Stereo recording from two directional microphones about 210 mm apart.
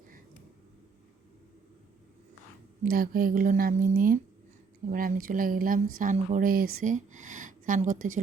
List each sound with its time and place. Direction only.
2.8 s a woman's voice: 45° right (ahead or behind)